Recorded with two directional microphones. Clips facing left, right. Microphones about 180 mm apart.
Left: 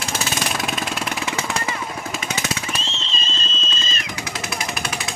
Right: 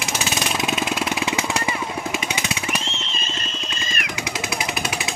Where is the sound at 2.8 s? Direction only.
25° left (ahead or behind).